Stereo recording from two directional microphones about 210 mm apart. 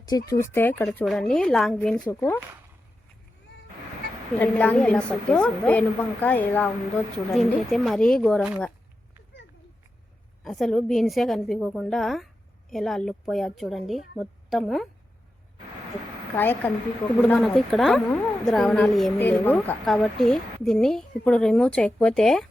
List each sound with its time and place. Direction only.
0.1 s a woman's voice: 15° left (ahead or behind)
4.4 s a woman's voice: 10° left (ahead or behind)
10.4 s a woman's voice: centre (ahead or behind)
16.3 s a woman's voice: 10° left (ahead or behind)